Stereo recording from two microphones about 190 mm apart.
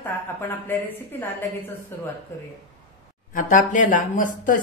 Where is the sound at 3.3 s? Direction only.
45° left (ahead or behind).